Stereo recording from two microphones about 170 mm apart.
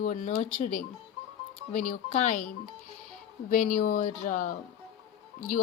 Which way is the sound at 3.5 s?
55° left (ahead or behind).